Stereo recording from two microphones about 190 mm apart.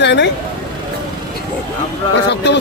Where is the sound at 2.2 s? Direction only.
65° left (ahead or behind).